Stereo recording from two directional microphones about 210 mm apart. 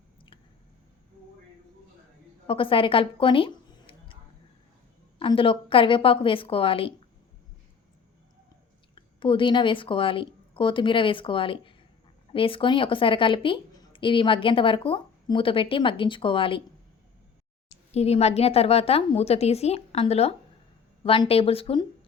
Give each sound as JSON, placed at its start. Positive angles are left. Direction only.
{"t": 2.5, "sound": "speech", "side_deg": 25}
{"t": 5.2, "sound": "a woman's voice", "side_deg": 25}
{"t": 9.2, "sound": "a woman's voice", "side_deg": 25}
{"t": 17.9, "sound": "a woman's voice", "side_deg": 30}